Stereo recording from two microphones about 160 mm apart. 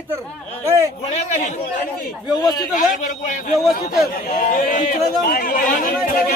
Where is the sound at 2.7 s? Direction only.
50° left (ahead or behind).